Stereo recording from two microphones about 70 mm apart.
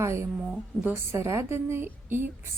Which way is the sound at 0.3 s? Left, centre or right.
Centre.